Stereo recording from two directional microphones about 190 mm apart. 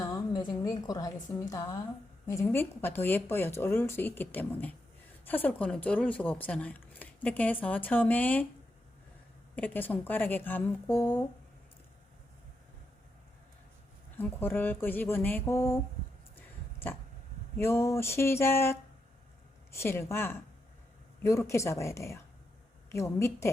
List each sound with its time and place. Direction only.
0.0 s a woman's voice: 15° left (ahead or behind)
9.6 s speech: 10° left (ahead or behind)
14.2 s speech: 10° left (ahead or behind)
17.6 s speech: 15° left (ahead or behind)